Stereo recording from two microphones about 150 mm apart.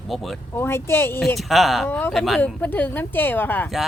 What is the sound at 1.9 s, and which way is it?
Speech, 15° left (ahead or behind).